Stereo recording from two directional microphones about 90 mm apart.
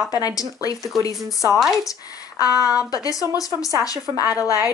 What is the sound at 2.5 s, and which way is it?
Speech, 10° right (ahead or behind).